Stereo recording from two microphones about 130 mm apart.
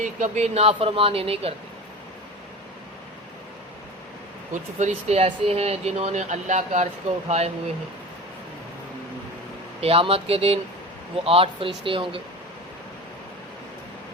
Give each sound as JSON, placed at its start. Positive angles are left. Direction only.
{"t": 0.0, "sound": "speech", "side_deg": -65}
{"t": 4.5, "sound": "speech", "side_deg": -60}
{"t": 7.3, "sound": "speech", "side_deg": -55}
{"t": 9.8, "sound": "speech", "side_deg": -45}